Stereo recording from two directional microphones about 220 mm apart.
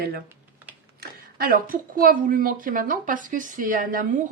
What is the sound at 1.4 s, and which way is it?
Speech, 40° right (ahead or behind).